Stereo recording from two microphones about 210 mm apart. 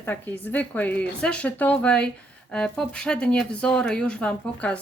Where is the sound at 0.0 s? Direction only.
10° left (ahead or behind).